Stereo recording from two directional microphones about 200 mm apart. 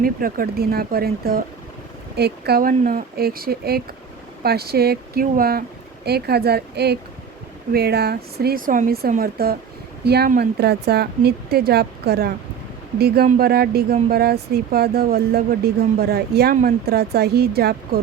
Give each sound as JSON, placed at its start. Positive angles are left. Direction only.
{"t": 0.0, "sound": "speech", "side_deg": -45}